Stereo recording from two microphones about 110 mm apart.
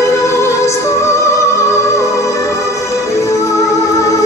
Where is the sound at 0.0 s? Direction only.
25° left (ahead or behind).